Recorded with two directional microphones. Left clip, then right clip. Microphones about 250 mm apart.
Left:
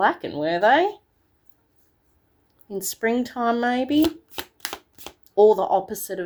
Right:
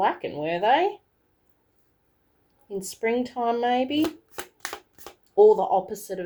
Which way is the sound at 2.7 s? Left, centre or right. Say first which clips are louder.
Left 2 dB; left.